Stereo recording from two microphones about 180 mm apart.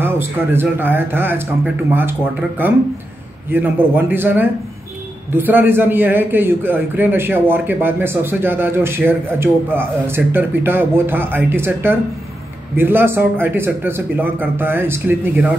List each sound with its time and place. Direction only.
0.0 s a man's voice: 10° right (ahead or behind)